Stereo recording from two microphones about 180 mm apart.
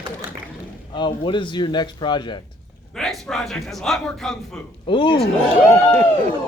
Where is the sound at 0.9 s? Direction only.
30° left (ahead or behind).